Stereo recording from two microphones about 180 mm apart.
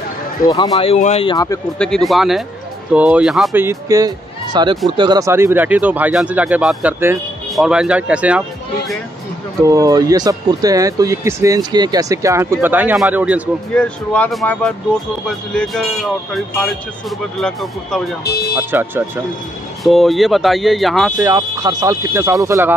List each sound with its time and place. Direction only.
0.5 s speech: 20° left (ahead or behind)
0.7 s speech: 40° left (ahead or behind)
1.3 s speech: 20° left (ahead or behind)
1.8 s speech: 5° left (ahead or behind)
3.5 s speech: 15° right (ahead or behind)
9.7 s speech: 20° right (ahead or behind)
13.7 s speech: 5° left (ahead or behind)
18.6 s speech: 10° right (ahead or behind)
19.8 s speech: centre (ahead or behind)
21.2 s speech: 20° right (ahead or behind)